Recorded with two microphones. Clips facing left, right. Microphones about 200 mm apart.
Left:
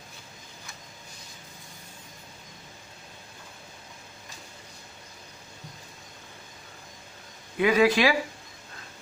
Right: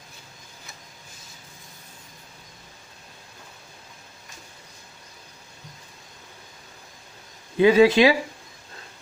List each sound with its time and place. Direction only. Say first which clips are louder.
7.5 s speech: right 6 dB; 30° right (ahead or behind)